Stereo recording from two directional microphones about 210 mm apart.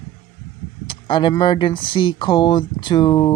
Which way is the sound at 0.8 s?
25° left (ahead or behind).